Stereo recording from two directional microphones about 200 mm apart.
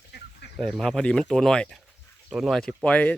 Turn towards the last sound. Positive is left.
turn(degrees=5)  # may be behind; listen again after turning